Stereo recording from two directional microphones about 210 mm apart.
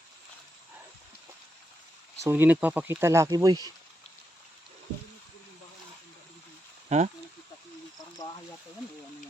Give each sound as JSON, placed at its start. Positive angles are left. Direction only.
{"t": 2.2, "sound": "speech", "side_deg": -10}
{"t": 6.8, "sound": "speech", "side_deg": -35}